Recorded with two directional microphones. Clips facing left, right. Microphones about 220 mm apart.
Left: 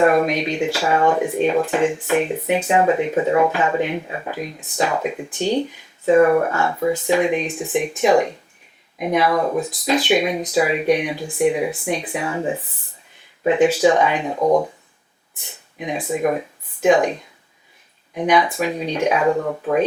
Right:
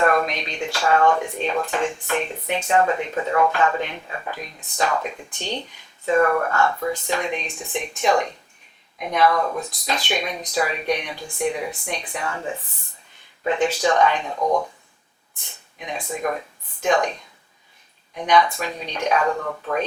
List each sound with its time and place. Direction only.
0.0 s speech: 10° left (ahead or behind)
9.4 s speech: 20° left (ahead or behind)
14.3 s speech: 25° left (ahead or behind)
15.8 s speech: 5° left (ahead or behind)